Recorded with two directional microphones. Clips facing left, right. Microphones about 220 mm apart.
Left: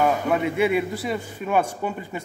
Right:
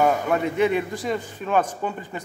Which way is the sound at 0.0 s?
Centre (ahead or behind).